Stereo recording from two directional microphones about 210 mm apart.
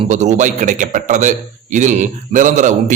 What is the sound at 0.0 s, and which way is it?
A man's voice, 35° right (ahead or behind).